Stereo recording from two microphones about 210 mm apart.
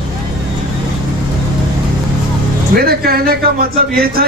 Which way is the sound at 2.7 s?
45° right (ahead or behind).